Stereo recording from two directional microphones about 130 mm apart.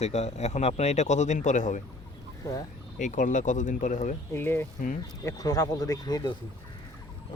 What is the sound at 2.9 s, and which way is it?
Speech, 75° left (ahead or behind).